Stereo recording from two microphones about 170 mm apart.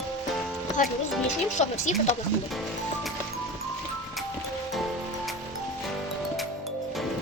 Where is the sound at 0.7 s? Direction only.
45° left (ahead or behind).